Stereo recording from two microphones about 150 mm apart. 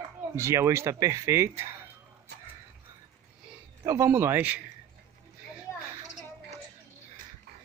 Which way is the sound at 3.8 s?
20° right (ahead or behind).